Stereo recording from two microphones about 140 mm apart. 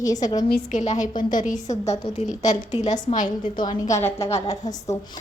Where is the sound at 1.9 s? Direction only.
55° left (ahead or behind).